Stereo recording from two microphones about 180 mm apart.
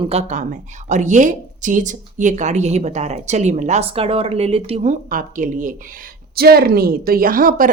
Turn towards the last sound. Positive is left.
turn(degrees=-50)  # may be behind; listen again after turning